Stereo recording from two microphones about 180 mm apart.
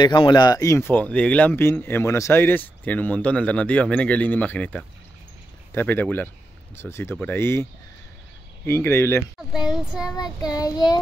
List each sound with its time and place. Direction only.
0.0 s speech: 25° left (ahead or behind)
8.6 s speech: 15° left (ahead or behind)
9.5 s child singing: 5° right (ahead or behind)
10.1 s child singing: 20° left (ahead or behind)